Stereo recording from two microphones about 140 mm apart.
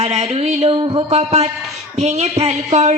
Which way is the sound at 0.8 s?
35° right (ahead or behind).